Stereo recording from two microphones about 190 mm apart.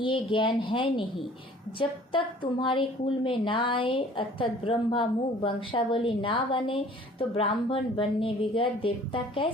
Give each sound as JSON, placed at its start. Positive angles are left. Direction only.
{"t": 0.0, "sound": "a woman's voice", "side_deg": 25}